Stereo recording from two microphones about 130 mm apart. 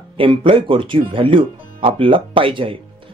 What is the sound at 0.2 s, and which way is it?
Speech, 40° right (ahead or behind).